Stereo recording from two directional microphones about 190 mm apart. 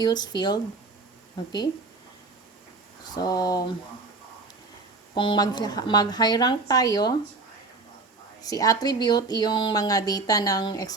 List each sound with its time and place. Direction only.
0.0 s speech: 20° left (ahead or behind)
3.2 s speech: 20° left (ahead or behind)
5.1 s speech: 25° left (ahead or behind)
8.4 s speech: 20° left (ahead or behind)